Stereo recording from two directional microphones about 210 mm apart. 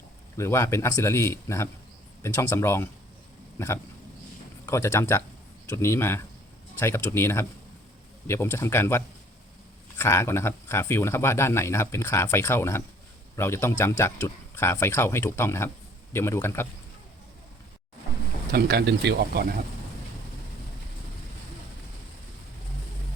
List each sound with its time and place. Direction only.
0.3 s speech: 15° left (ahead or behind)
4.6 s speech: 15° left (ahead or behind)
18.5 s speech: 50° right (ahead or behind)